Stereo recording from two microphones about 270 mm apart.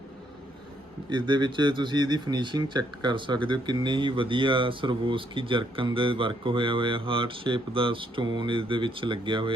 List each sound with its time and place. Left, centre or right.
1.1 s speech: centre